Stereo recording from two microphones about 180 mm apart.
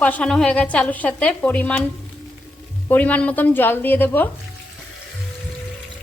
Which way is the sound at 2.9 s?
10° left (ahead or behind).